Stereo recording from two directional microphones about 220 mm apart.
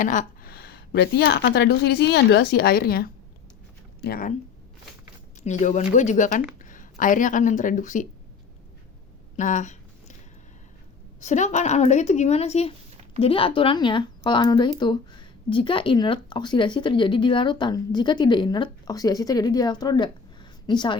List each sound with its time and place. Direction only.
0.0 s speech: 35° left (ahead or behind)
5.4 s speech: 35° left (ahead or behind)
9.4 s a sound: 35° left (ahead or behind)
11.2 s speech: 30° left (ahead or behind)